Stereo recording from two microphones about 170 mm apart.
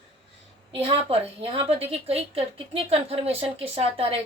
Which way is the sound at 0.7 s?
35° right (ahead or behind).